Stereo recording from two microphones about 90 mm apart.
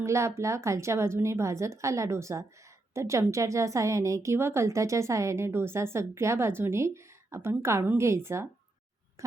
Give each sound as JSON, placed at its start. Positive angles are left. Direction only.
{"t": 0.0, "sound": "a woman's voice", "side_deg": -30}